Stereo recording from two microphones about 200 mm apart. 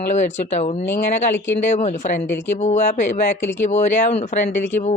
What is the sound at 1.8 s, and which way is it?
Speech, 35° left (ahead or behind).